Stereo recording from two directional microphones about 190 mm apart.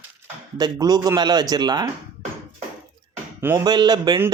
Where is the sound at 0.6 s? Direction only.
20° right (ahead or behind).